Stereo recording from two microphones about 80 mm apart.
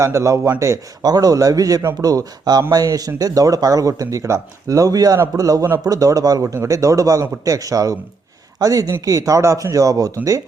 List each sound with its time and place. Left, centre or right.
0.0 s a man's voice: right
1.0 s a man's voice: right